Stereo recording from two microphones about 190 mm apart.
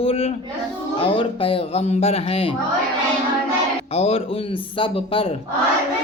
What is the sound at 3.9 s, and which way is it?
Speech, 30° left (ahead or behind).